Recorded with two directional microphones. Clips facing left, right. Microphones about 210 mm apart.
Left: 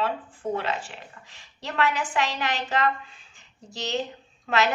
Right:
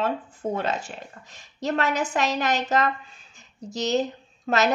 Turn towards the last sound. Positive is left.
turn(degrees=-40)  # may be behind; listen again after turning